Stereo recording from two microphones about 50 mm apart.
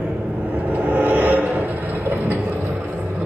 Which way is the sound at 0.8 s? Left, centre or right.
Right.